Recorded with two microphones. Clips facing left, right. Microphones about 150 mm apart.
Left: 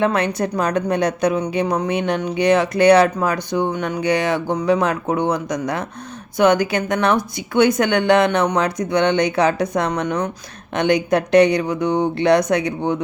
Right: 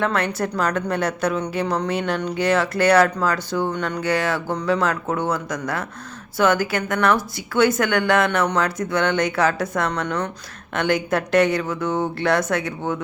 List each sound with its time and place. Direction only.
0.0 s a woman's voice: 20° left (ahead or behind)